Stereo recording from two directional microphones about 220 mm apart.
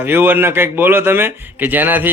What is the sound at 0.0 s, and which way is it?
A man's voice, 10° right (ahead or behind).